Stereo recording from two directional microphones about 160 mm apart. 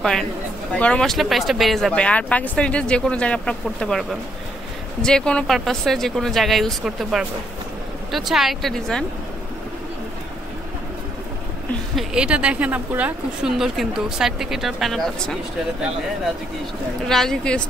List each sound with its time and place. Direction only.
0.7 s speech: 5° left (ahead or behind)
11.9 s speech: 5° right (ahead or behind)
17.1 s speech: 5° left (ahead or behind)